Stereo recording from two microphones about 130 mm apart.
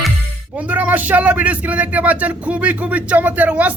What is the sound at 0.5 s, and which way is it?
Speech, 10° right (ahead or behind).